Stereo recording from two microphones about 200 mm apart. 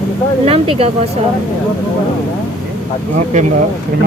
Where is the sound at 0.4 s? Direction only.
30° right (ahead or behind).